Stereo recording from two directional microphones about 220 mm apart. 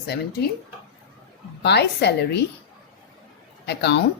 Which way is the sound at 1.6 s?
50° left (ahead or behind).